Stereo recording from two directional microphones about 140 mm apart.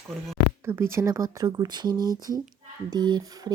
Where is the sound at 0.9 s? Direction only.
25° right (ahead or behind).